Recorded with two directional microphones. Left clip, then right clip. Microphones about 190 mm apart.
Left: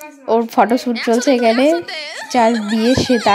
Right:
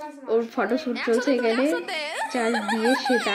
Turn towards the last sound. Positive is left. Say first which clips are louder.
# left 6 dB
turn(degrees=45)  # may be behind; listen again after turning